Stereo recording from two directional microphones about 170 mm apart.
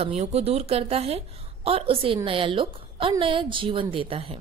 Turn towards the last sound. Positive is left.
turn(degrees=-35)  # may be behind; listen again after turning